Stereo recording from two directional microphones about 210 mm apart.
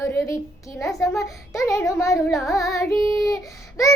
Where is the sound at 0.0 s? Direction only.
10° left (ahead or behind).